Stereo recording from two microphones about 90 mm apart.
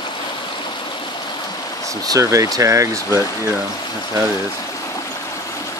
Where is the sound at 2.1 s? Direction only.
35° right (ahead or behind).